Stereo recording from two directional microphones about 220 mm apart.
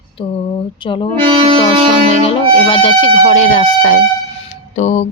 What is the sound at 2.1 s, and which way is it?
Speech, 25° left (ahead or behind).